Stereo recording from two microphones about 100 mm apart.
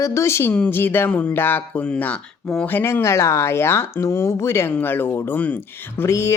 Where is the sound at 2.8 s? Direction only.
25° left (ahead or behind).